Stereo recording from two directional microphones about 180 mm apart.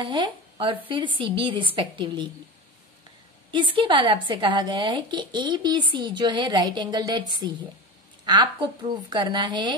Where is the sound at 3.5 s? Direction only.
25° right (ahead or behind).